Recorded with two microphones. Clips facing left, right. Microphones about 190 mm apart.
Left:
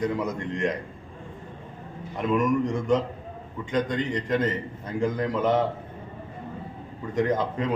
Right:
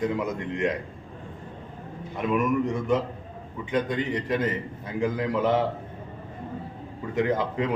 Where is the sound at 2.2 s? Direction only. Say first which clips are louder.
Left 1 dB; 5° right (ahead or behind).